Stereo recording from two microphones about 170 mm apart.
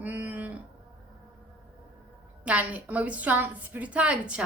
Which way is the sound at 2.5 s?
10° right (ahead or behind).